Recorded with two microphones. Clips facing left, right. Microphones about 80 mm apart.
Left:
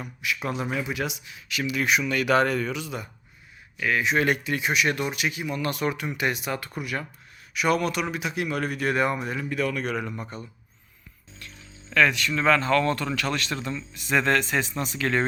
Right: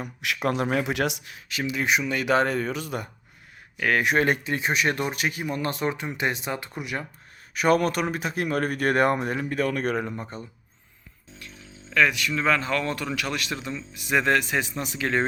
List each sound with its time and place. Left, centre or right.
0.3 s speech: right
1.5 s speech: right
4.2 s speech: right
7.5 s speech: right
10.2 s speech: right
11.9 s speech: centre